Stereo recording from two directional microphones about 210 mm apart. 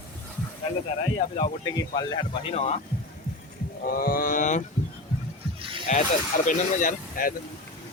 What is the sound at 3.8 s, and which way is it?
Speech, 45° left (ahead or behind).